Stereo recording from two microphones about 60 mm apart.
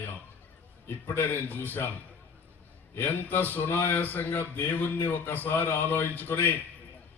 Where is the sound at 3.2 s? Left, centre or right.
Left.